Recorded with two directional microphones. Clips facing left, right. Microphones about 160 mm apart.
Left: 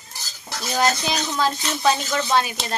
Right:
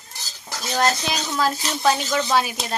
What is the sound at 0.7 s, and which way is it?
A woman's voice, centre (ahead or behind).